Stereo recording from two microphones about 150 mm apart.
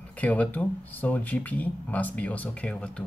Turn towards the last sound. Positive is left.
turn(degrees=5)  # may be behind; listen again after turning